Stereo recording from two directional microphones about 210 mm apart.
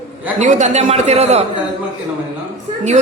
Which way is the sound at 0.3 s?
35° right (ahead or behind).